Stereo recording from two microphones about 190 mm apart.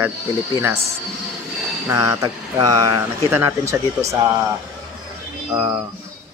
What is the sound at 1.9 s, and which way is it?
Speech, 15° right (ahead or behind).